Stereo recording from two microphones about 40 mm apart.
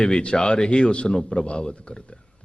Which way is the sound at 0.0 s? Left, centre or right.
Left.